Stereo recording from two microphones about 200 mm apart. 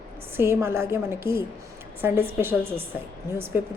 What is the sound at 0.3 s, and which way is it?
A woman's voice, 10° right (ahead or behind).